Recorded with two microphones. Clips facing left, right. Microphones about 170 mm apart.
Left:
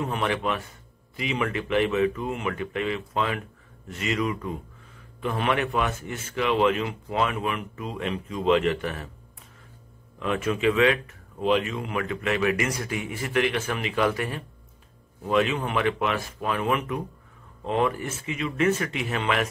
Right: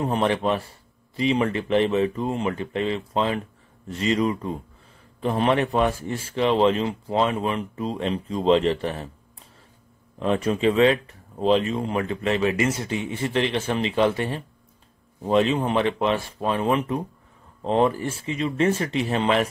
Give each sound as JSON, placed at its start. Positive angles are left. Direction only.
{"t": 0.0, "sound": "a man's voice", "side_deg": -35}
{"t": 10.1, "sound": "a man's voice", "side_deg": -35}